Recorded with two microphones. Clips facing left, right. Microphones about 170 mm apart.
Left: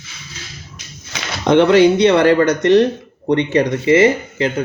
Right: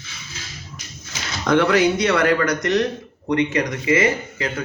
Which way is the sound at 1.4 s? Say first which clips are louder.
Left 6 dB; 25° left (ahead or behind).